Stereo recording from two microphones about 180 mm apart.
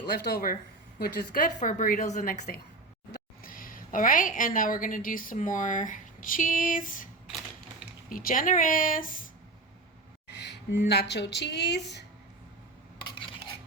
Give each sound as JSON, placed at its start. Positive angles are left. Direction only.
{"t": 0.1, "sound": "a woman's voice", "side_deg": 60}
{"t": 8.1, "sound": "a woman's voice", "side_deg": 50}
{"t": 10.2, "sound": "a woman's voice", "side_deg": 70}